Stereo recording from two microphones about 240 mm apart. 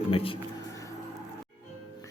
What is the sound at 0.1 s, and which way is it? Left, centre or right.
Speech, left.